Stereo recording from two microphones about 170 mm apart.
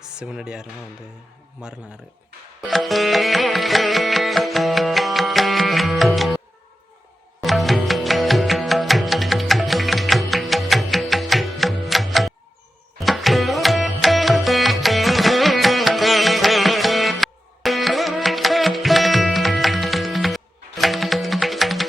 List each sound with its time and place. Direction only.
0.0 s speech: 5° right (ahead or behind)
2.6 s music: centre (ahead or behind)
7.4 s music: centre (ahead or behind)